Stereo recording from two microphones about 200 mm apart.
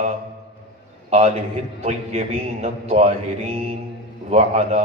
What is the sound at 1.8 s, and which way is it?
A man's voice, 30° right (ahead or behind).